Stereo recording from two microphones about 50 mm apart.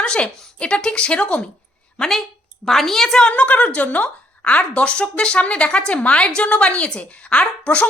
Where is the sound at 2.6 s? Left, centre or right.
Centre.